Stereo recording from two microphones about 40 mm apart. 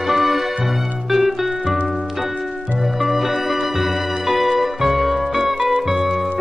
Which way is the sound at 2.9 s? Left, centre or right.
Centre.